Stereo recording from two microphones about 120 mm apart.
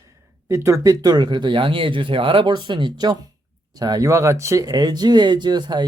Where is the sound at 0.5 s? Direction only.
25° right (ahead or behind).